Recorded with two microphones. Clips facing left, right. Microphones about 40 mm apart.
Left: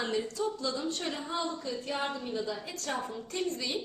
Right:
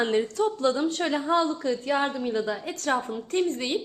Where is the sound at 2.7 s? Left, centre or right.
Right.